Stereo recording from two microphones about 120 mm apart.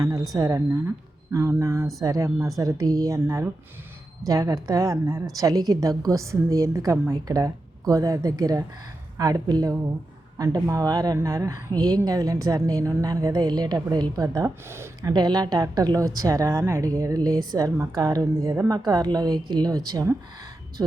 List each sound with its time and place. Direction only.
0.0 s speech: 30° right (ahead or behind)
15.1 s speech: 35° right (ahead or behind)